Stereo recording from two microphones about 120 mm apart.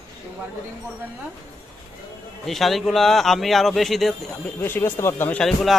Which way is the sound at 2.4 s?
Centre (ahead or behind).